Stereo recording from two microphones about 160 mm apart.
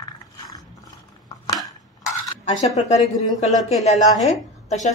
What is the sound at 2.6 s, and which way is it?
Speech, 40° left (ahead or behind).